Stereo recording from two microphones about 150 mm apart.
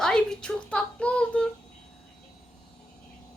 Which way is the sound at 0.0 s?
5° left (ahead or behind).